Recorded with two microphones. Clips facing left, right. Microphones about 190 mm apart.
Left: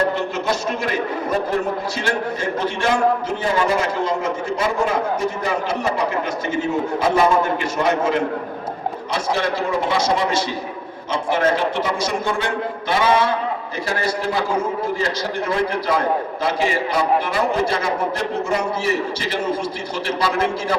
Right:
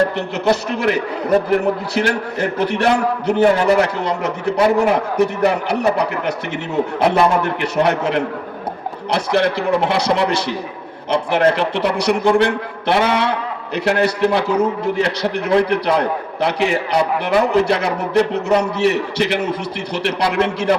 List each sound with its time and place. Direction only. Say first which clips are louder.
0.2 s a man's voice: right 4 dB; 65° right (ahead or behind)
2.0 s a man's voice: right 4 dB; 65° right (ahead or behind)